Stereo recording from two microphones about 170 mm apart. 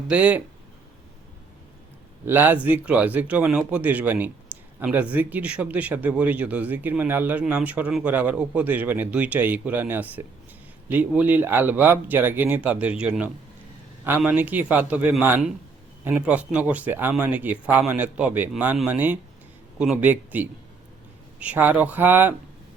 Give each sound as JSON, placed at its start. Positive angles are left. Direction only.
{"t": 0.1, "sound": "a man's voice", "side_deg": -10}
{"t": 2.2, "sound": "a man's voice", "side_deg": -10}